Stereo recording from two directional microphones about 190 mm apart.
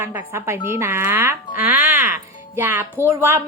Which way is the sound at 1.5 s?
10° right (ahead or behind).